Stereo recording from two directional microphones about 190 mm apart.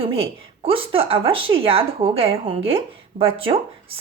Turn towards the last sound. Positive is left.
turn(degrees=-30)  # may be behind; listen again after turning